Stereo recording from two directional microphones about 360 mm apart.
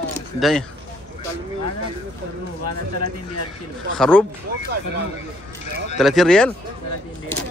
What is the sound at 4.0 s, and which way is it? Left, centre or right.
Speech, centre.